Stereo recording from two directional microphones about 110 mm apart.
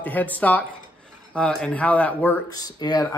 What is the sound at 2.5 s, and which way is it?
Speech, 35° left (ahead or behind).